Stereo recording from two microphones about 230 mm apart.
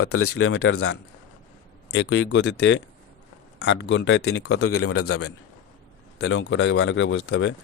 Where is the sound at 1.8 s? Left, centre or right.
Left.